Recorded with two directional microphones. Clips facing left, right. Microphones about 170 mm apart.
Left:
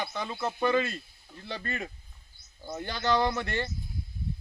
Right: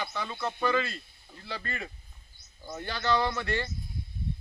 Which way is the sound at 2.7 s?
20° left (ahead or behind).